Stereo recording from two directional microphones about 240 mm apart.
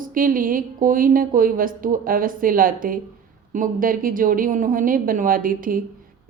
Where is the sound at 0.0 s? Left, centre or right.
Right.